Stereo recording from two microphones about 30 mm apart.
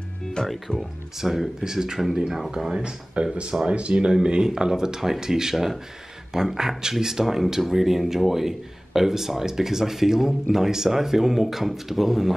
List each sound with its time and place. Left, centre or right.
0.5 s speech: centre
1.1 s speech: centre
2.7 s speech: right; by 12.4 s centre